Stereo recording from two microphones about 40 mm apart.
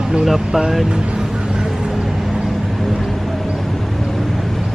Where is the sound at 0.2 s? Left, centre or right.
Centre.